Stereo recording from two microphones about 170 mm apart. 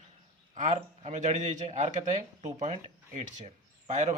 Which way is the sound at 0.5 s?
45° right (ahead or behind).